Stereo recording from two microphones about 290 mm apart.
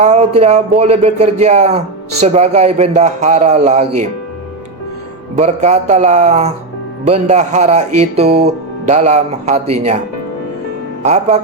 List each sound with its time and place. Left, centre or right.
0.0 s speech: right
5.4 s speech: right
11.0 s speech: right